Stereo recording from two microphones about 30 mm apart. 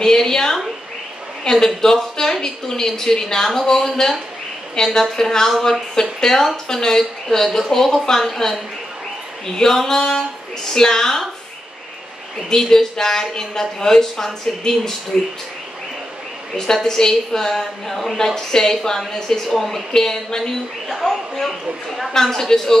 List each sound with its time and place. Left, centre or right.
0.0 s a woman's voice: centre
9.6 s a woman's voice: centre
12.4 s speech: centre
16.8 s a woman's voice: centre
19.4 s speech: centre
19.9 s speech: centre
22.1 s speech: centre